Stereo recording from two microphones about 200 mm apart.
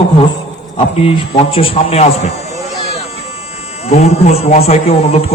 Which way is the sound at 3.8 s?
30° left (ahead or behind).